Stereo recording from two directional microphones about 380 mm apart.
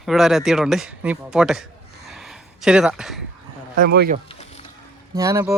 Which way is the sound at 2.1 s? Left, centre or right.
Centre.